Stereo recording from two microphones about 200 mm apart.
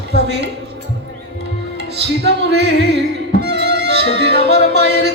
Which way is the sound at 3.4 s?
55° right (ahead or behind).